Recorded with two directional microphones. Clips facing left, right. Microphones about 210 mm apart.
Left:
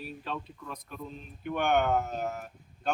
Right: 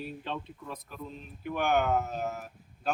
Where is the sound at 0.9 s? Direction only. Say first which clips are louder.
Even; 5° right (ahead or behind).